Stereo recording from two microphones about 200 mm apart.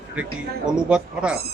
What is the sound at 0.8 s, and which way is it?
Speech, 5° right (ahead or behind).